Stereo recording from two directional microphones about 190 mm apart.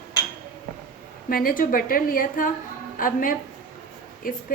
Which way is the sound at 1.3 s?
50° left (ahead or behind).